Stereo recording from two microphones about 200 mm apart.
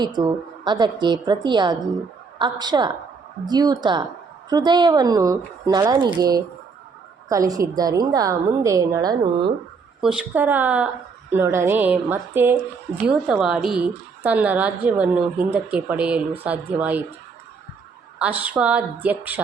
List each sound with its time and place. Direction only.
0.2 s a woman's voice: 20° right (ahead or behind)
10.0 s a woman's voice: 5° right (ahead or behind)
18.2 s a woman's voice: 10° right (ahead or behind)